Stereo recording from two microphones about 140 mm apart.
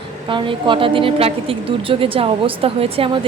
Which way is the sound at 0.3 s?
35° right (ahead or behind).